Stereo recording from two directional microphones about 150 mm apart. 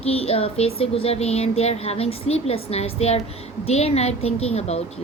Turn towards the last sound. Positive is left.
turn(degrees=45)  # may be behind; listen again after turning